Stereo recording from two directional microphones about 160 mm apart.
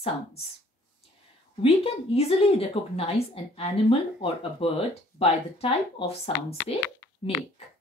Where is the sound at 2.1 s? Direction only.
40° left (ahead or behind).